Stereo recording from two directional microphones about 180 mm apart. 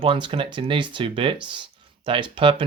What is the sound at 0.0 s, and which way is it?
Speech, 30° right (ahead or behind).